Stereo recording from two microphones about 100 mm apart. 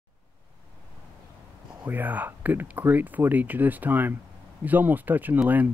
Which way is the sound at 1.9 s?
15° right (ahead or behind).